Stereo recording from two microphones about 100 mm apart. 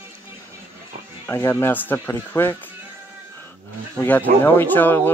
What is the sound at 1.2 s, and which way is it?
Speech, 25° left (ahead or behind).